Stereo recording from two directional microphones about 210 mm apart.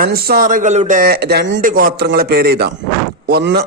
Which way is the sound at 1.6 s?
40° right (ahead or behind).